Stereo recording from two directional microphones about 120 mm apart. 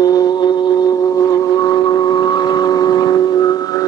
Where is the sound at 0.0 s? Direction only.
35° left (ahead or behind).